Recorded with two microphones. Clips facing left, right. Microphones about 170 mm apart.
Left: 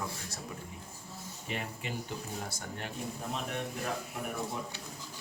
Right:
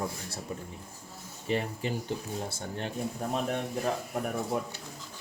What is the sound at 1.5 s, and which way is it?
A man's voice, 35° right (ahead or behind).